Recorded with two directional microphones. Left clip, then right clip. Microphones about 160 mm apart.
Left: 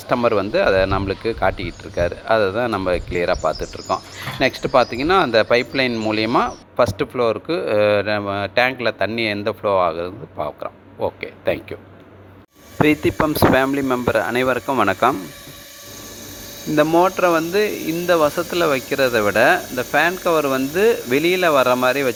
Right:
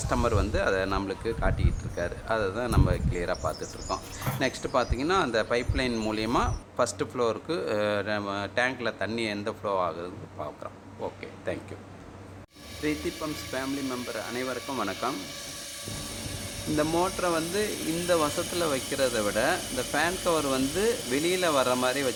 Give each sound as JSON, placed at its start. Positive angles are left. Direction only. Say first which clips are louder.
{"t": 0.1, "sound": "speech", "louder": "left 10 dB", "side_deg": 35}
{"t": 12.8, "sound": "speech", "louder": "left 15 dB", "side_deg": 70}
{"t": 16.7, "sound": "speech", "louder": "left 12 dB", "side_deg": 45}